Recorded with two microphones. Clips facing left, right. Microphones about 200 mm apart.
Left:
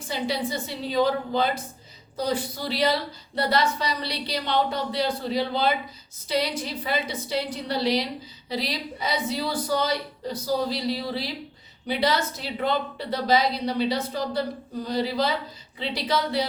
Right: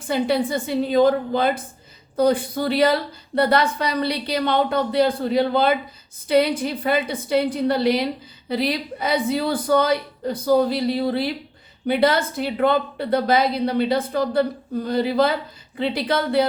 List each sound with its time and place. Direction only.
0.1 s a woman's voice: 55° right (ahead or behind)